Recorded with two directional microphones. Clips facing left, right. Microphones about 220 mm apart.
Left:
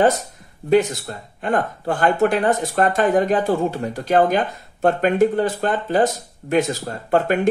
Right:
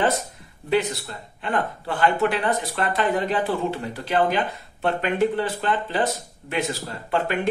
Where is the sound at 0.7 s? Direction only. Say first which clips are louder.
Left 6 dB; 45° left (ahead or behind).